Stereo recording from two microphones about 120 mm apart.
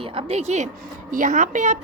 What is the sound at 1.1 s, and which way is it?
Speech, 90° right.